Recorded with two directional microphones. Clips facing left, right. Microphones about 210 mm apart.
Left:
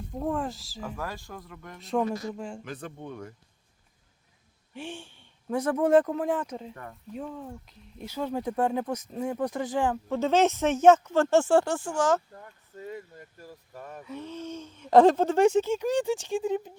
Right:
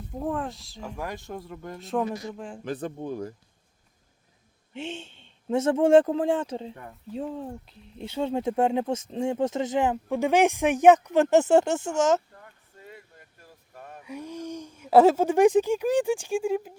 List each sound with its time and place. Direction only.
0.2 s speech: centre (ahead or behind)
0.9 s speech: 20° right (ahead or behind)
1.8 s speech: centre (ahead or behind)
2.6 s speech: 35° right (ahead or behind)
4.7 s speech: 20° right (ahead or behind)
12.4 s speech: 40° left (ahead or behind)
14.0 s speech: 10° right (ahead or behind)